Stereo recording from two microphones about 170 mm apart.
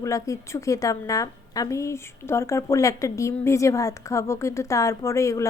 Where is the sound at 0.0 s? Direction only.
20° left (ahead or behind).